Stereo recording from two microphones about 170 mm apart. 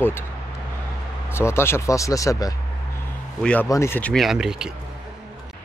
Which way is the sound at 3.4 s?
5° left (ahead or behind).